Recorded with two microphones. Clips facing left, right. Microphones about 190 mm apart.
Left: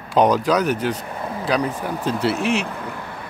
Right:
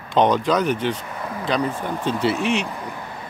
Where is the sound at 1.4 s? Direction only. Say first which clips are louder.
Left 1 dB; 10° left (ahead or behind).